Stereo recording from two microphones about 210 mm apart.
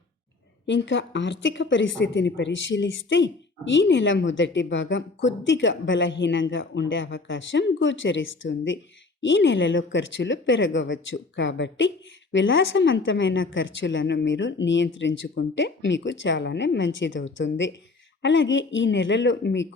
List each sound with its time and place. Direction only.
0.7 s speech: 60° left (ahead or behind)